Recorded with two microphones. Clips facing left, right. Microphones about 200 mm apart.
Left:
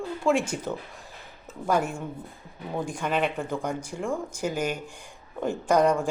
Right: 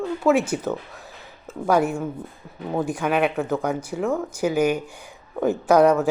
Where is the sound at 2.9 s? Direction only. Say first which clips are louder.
Right 4 dB; 65° right (ahead or behind).